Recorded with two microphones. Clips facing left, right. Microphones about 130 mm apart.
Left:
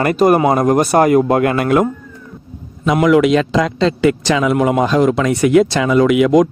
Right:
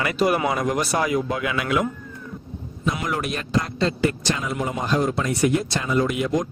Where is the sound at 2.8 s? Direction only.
90° left.